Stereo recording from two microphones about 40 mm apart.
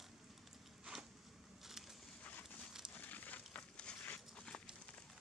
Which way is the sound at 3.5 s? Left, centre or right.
Left.